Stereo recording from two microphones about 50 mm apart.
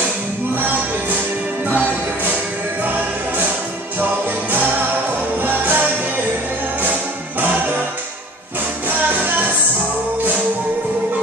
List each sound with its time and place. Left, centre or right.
1.7 s music: right
8.8 s music: right